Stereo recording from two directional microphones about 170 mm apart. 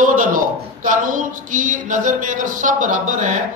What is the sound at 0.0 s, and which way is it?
A man's voice, 50° right (ahead or behind).